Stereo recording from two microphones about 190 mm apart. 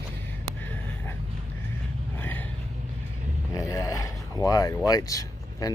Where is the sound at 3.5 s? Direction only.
15° left (ahead or behind).